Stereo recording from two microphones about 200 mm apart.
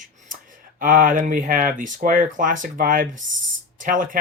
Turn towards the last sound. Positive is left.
turn(degrees=-40)  # may be behind; listen again after turning